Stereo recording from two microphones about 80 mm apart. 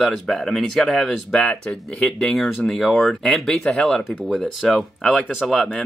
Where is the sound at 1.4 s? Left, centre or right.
Centre.